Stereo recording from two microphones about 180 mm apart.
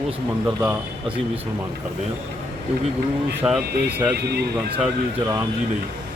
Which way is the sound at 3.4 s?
5° right (ahead or behind).